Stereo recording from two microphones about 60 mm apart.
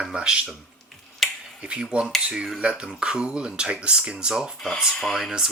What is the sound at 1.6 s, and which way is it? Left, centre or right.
Speech, centre.